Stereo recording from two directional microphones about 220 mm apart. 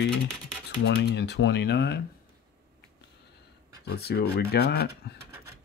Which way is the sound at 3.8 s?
45° left (ahead or behind).